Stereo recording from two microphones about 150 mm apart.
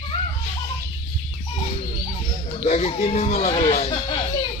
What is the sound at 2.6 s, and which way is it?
Speech, 45° left (ahead or behind).